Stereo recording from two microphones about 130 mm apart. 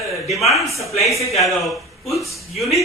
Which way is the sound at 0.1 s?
Centre (ahead or behind).